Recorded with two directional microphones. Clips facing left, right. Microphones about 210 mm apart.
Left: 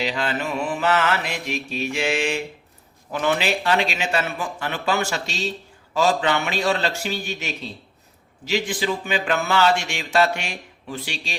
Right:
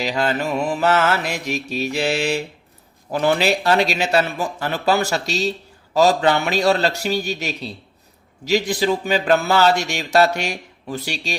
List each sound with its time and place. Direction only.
0.0 s speech: 45° right (ahead or behind)